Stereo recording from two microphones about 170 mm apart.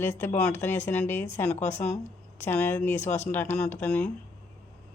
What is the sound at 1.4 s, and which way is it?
Speech, 45° left (ahead or behind).